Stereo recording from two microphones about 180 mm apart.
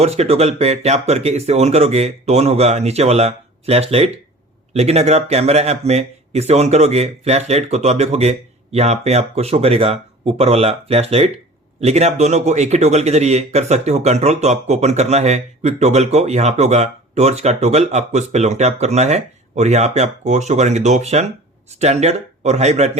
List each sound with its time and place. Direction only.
0.0 s speech: 35° right (ahead or behind)